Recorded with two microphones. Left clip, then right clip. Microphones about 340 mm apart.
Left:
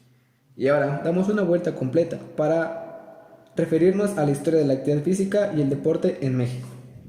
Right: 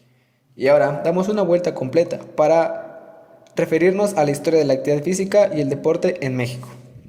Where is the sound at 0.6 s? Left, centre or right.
Centre.